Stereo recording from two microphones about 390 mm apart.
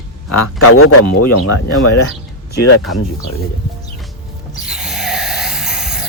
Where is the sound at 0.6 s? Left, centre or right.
Left.